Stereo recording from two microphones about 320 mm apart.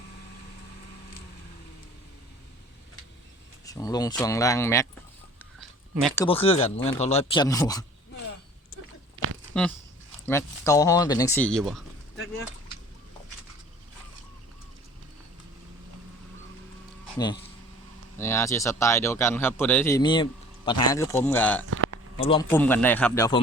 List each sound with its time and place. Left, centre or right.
3.7 s speech: centre
5.5 s a sound: centre
6.2 s speech: centre
9.5 s speech: centre
18.2 s speech: centre
21.7 s a sound: right
22.2 s speech: centre